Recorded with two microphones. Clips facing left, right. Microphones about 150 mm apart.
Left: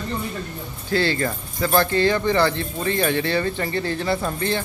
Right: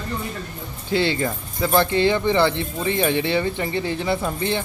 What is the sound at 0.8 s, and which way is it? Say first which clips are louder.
Speech: even; 20° right (ahead or behind).